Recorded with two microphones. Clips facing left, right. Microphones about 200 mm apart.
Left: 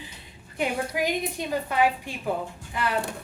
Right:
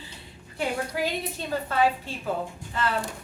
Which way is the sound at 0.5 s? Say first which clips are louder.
Left 1 dB; 15° left (ahead or behind).